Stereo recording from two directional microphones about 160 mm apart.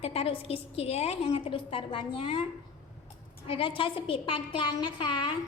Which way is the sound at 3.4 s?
35° left (ahead or behind).